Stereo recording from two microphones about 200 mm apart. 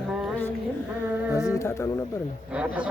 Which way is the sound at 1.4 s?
15° left (ahead or behind).